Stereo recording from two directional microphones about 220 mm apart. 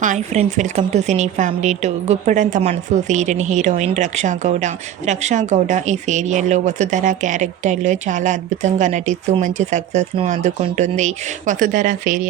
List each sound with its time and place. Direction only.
0.0 s a woman's voice: 35° right (ahead or behind)